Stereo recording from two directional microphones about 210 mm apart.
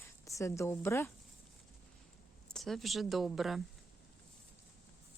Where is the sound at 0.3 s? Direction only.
15° left (ahead or behind).